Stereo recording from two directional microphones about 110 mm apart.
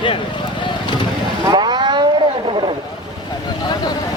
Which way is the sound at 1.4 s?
40° right (ahead or behind).